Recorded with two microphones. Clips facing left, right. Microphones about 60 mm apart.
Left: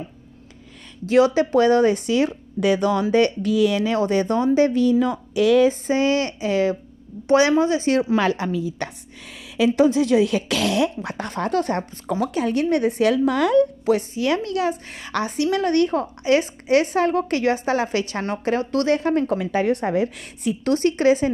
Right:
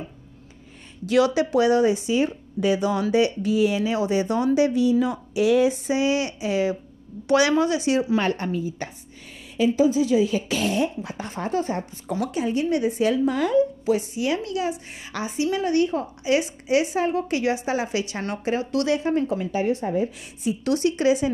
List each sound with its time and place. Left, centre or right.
1.0 s a woman's voice: left
7.2 s speech: left
8.2 s a woman's voice: left
12.1 s a woman's voice: left
20.6 s a woman's voice: left